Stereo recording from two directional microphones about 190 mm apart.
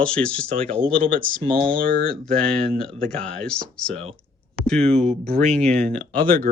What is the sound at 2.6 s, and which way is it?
Speech, 5° left (ahead or behind).